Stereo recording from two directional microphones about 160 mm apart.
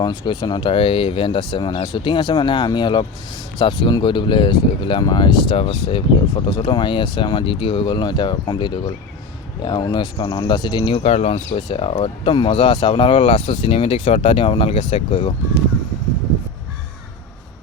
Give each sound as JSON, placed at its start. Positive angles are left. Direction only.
{"t": 0.0, "sound": "speech", "side_deg": 25}